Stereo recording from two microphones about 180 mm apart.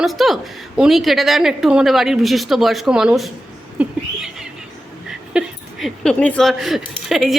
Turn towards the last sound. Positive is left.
turn(degrees=0)  # may be behind; listen again after turning